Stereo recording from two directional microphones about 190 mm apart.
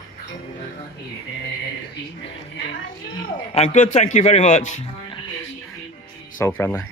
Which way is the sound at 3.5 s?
40° left (ahead or behind).